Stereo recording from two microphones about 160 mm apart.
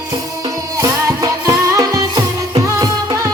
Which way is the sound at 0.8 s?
20° right (ahead or behind).